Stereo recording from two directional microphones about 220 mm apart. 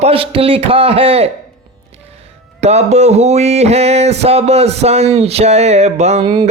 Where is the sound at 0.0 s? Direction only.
25° right (ahead or behind).